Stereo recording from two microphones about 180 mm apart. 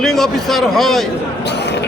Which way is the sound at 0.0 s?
Centre (ahead or behind).